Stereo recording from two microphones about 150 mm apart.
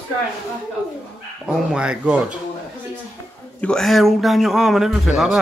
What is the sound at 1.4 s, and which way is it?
Speech, 5° right (ahead or behind).